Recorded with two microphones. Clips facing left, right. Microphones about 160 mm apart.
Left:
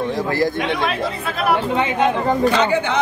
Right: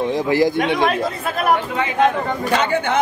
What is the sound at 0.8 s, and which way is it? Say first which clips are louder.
Speech: right 2 dB; 45° right (ahead or behind).